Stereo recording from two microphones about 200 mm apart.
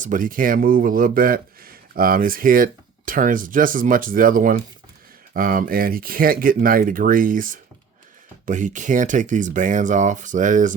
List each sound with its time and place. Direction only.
0.0 s a man's voice: 40° right (ahead or behind)